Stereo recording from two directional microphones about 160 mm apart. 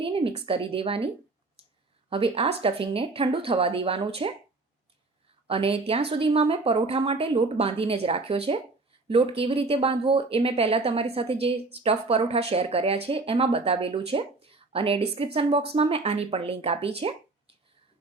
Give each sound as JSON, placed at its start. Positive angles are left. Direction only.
{"t": 0.0, "sound": "a woman's voice", "side_deg": -35}
{"t": 5.5, "sound": "speech", "side_deg": -35}